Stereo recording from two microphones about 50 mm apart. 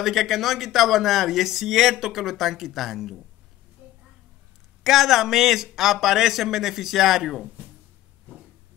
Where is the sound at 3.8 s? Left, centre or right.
Right.